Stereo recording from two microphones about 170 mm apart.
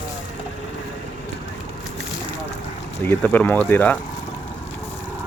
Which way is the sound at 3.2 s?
10° left (ahead or behind).